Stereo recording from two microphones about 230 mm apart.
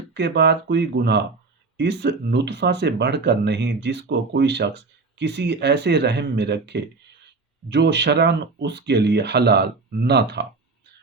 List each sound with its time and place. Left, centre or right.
0.1 s speech: right